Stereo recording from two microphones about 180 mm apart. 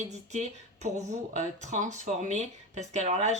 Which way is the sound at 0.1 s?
40° right (ahead or behind).